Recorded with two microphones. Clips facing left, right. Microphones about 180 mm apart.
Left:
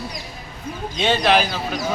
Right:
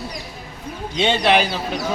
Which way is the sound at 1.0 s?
20° right (ahead or behind).